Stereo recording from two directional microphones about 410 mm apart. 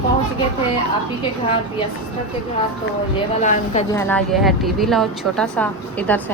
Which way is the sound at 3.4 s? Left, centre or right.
Centre.